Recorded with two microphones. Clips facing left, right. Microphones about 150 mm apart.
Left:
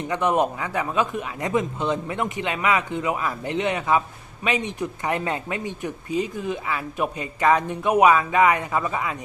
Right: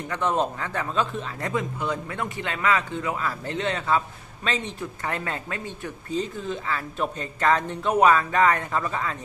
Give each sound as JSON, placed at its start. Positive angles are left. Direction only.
{"t": 0.1, "sound": "speech", "side_deg": 15}